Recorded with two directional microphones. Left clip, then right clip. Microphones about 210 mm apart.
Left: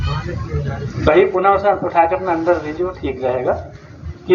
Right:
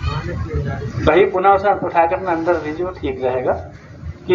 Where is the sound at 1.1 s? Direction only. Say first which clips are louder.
Even; 20° right (ahead or behind).